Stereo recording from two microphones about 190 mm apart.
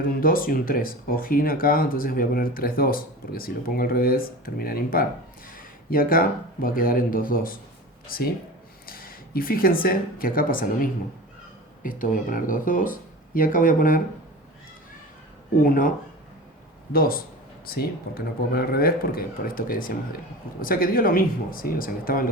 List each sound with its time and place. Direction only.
0.2 s speech: 50° left (ahead or behind)
8.9 s a sound: 50° left (ahead or behind)
9.8 s speech: 50° left (ahead or behind)
15.6 s speech: 45° left (ahead or behind)
16.9 s speech: 50° left (ahead or behind)